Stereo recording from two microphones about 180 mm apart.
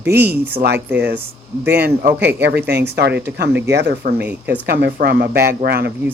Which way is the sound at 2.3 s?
70° right (ahead or behind).